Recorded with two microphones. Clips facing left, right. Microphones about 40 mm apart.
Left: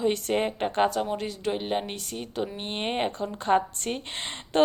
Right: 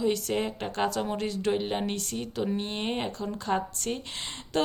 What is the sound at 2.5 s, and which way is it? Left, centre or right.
Speech, left.